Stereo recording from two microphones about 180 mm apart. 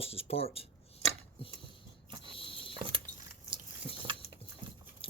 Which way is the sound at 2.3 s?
30° left (ahead or behind).